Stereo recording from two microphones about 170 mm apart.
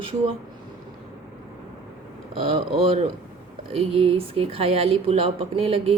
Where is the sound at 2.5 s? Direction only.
35° right (ahead or behind).